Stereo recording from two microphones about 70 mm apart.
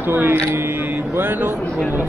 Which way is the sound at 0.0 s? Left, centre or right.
Right.